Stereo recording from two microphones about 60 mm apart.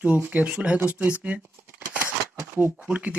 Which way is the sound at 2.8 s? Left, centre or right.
Right.